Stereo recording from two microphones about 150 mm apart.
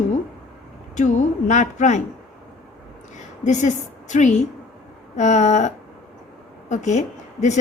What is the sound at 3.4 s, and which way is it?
A woman's voice, 55° left (ahead or behind).